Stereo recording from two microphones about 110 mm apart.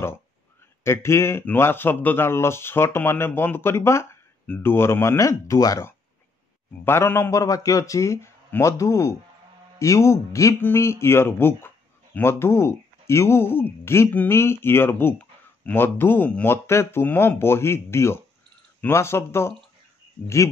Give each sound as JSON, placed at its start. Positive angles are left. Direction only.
{"t": 0.8, "sound": "speech", "side_deg": 25}